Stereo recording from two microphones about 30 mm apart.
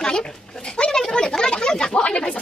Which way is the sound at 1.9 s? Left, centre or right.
Left.